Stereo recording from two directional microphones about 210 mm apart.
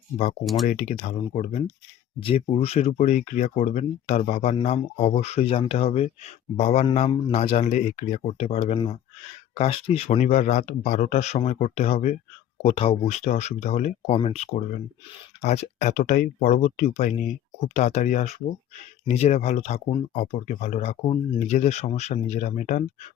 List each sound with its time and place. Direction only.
0.4 s speech: centre (ahead or behind)
0.7 s speech: 35° left (ahead or behind)